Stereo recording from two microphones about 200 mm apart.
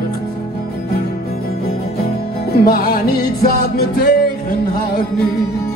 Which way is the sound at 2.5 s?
50° left (ahead or behind).